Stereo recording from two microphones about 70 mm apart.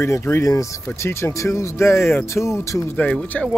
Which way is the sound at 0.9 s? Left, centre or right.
Left.